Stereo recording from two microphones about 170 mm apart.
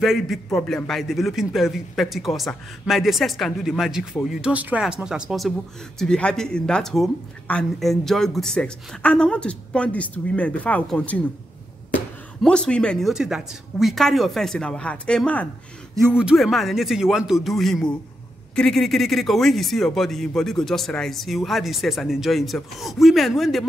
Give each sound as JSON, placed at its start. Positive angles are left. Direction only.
{"t": 0.0, "sound": "a man's voice", "side_deg": 0}
{"t": 12.4, "sound": "a man's voice", "side_deg": 5}